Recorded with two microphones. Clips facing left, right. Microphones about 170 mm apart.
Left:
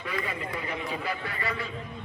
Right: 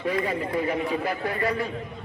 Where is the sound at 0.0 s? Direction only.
35° right (ahead or behind).